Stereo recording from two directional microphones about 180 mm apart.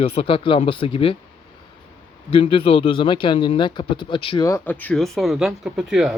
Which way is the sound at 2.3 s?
30° left (ahead or behind).